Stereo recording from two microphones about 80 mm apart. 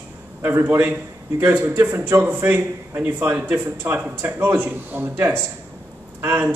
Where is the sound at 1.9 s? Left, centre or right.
Right.